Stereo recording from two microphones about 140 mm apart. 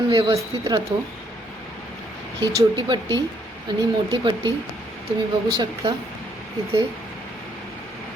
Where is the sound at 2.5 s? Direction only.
30° right (ahead or behind).